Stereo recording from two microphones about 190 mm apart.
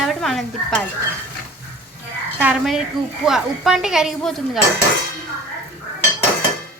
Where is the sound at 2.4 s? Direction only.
5° right (ahead or behind).